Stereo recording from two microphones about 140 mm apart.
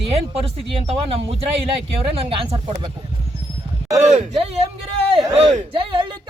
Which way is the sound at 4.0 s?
55° right (ahead or behind).